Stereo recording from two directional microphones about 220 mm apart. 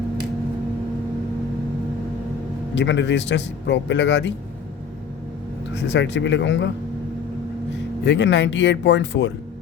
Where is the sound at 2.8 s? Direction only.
55° left (ahead or behind).